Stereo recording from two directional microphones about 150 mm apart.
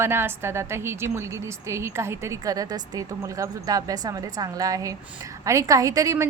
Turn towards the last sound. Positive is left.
turn(degrees=-20)  # may be behind; listen again after turning